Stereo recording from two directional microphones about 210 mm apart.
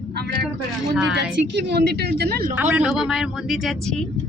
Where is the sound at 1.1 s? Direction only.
55° right (ahead or behind).